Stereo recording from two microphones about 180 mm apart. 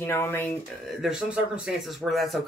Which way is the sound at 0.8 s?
5° right (ahead or behind).